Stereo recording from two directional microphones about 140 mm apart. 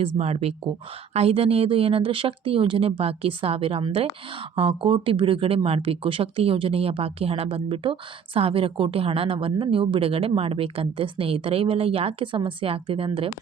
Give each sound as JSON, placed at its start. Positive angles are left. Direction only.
{"t": 0.0, "sound": "speech", "side_deg": -45}